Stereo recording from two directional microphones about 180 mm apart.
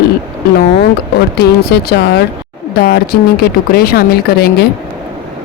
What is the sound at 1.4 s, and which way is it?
Speech, 60° left (ahead or behind).